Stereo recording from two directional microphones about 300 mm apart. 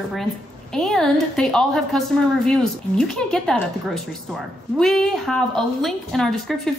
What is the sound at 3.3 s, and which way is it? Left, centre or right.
A woman's voice, centre.